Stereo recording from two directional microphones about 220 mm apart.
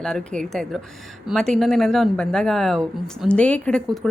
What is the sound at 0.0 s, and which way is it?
Speech, 5° left (ahead or behind).